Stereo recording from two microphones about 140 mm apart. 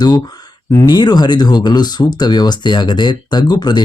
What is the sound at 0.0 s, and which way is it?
Speech, 30° left (ahead or behind).